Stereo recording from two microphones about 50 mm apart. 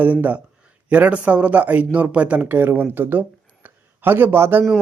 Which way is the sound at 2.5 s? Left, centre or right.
Right.